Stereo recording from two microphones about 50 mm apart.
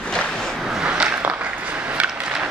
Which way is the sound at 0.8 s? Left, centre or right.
Right.